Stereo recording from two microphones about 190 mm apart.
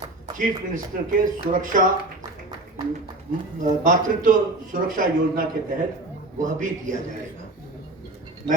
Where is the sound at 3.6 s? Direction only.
45° right (ahead or behind).